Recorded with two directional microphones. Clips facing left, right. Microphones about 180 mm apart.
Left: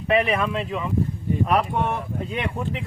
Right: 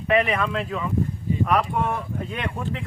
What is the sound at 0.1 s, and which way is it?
Speech, 25° left (ahead or behind).